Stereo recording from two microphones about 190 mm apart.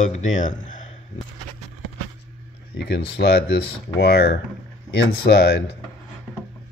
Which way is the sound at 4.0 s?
60° left (ahead or behind).